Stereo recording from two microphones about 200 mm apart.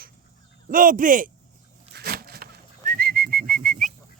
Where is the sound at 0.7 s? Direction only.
45° right (ahead or behind).